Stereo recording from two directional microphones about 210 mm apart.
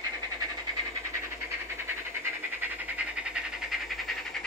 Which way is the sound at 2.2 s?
10° right (ahead or behind).